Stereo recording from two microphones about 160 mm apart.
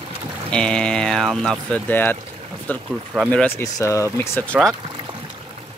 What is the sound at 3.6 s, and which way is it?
Speech, 20° left (ahead or behind).